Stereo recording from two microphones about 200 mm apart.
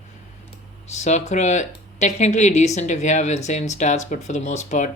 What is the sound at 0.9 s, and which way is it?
Speech, 35° left (ahead or behind).